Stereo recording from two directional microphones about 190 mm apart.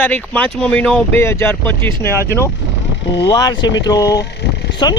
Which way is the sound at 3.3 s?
20° left (ahead or behind).